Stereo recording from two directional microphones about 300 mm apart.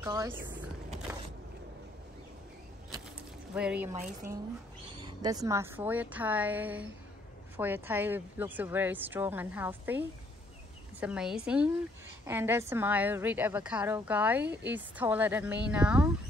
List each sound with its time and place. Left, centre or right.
0.0 s speech: centre
1.1 s vehicle: centre
3.5 s a woman's voice: centre
3.9 s a woman's voice: right
5.0 s a woman's voice: centre